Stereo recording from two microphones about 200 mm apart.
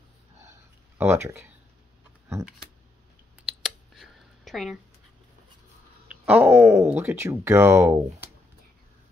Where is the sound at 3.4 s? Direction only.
Centre (ahead or behind).